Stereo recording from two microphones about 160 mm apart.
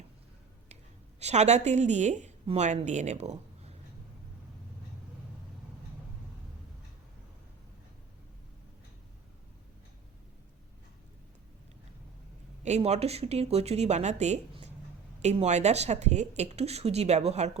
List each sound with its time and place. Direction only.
1.2 s speech: 45° right (ahead or behind)
12.6 s speech: 45° right (ahead or behind)